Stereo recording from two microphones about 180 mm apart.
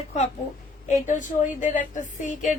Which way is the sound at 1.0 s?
45° left (ahead or behind).